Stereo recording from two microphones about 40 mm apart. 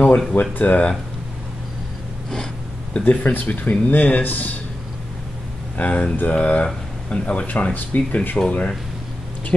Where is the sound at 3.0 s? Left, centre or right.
Left.